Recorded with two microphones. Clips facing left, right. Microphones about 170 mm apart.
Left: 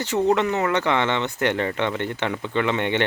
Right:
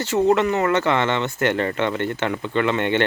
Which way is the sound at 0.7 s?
15° left (ahead or behind).